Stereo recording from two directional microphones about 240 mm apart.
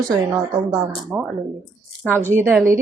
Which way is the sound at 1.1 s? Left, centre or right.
Centre.